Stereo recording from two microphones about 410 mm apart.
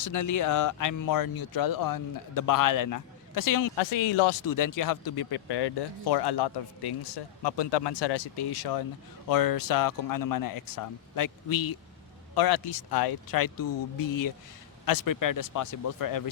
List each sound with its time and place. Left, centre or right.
0.0 s speech: left
3.8 s speech: left